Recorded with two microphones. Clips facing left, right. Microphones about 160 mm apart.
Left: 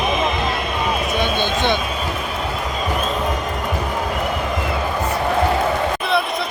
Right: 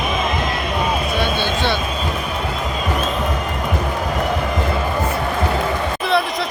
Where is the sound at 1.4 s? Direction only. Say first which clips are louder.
Left 1 dB; 20° left (ahead or behind).